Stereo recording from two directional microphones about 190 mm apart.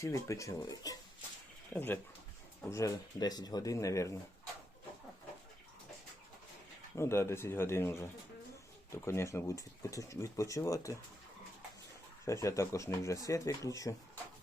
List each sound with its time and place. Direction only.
0.0 s speech: 15° left (ahead or behind)
6.9 s speech: 15° left (ahead or behind)
12.2 s speech: 15° left (ahead or behind)